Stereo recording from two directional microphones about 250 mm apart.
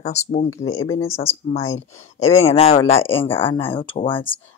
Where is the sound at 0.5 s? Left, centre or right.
Centre.